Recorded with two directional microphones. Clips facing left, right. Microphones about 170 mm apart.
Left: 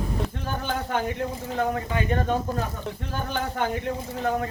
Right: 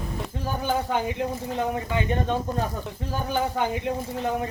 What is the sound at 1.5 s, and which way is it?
Speech, 20° right (ahead or behind).